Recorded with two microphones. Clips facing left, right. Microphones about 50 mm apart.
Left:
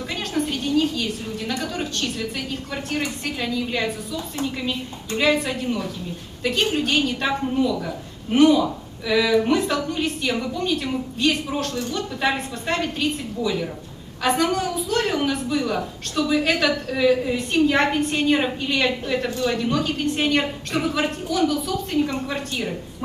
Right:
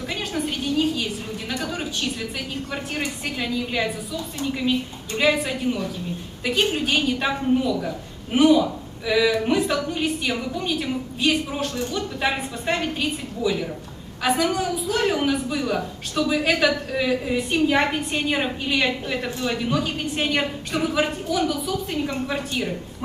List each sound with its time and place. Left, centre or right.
0.1 s a woman's voice: centre